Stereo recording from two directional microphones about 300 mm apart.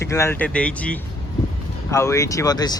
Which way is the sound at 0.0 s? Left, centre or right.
Centre.